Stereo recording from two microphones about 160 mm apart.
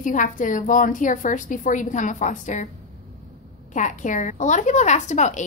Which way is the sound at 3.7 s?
50° left (ahead or behind).